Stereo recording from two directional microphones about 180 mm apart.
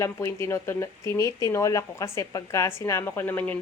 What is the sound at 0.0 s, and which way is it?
Speech, 15° left (ahead or behind).